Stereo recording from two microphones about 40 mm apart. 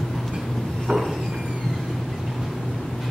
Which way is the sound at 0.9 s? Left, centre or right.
Centre.